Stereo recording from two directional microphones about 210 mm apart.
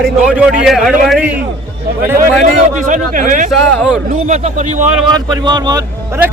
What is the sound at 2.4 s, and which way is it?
A man's voice, 40° right (ahead or behind).